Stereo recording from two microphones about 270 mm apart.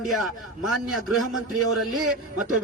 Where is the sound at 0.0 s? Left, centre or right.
Centre.